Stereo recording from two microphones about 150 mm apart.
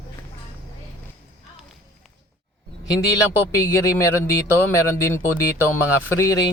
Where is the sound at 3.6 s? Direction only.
20° left (ahead or behind).